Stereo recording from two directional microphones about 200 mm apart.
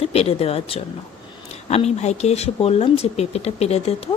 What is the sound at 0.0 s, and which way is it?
Speech, 30° left (ahead or behind).